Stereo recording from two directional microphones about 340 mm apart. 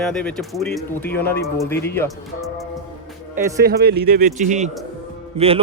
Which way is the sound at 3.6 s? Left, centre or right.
Right.